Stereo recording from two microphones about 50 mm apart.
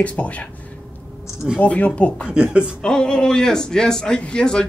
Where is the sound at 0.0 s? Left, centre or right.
Left.